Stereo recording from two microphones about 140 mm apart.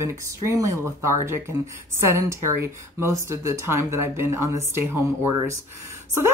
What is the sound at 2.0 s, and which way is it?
Speech, 20° right (ahead or behind).